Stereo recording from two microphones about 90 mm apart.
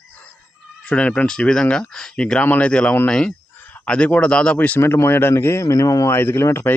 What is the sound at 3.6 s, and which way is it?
Speech, 20° left (ahead or behind).